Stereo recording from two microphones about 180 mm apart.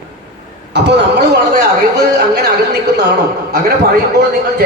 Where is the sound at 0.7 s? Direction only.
70° right (ahead or behind).